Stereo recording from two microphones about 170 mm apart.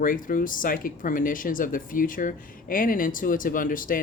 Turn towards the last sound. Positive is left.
turn(degrees=55)  # may be behind; listen again after turning